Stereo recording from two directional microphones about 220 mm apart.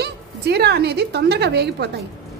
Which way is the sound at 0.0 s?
50° right (ahead or behind).